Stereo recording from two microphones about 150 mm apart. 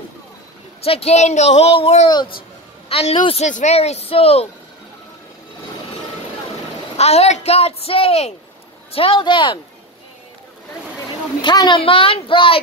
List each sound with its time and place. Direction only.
0.8 s a child's voice: 45° left (ahead or behind)
7.0 s a child's voice: 45° left (ahead or behind)
11.4 s speech: 30° left (ahead or behind)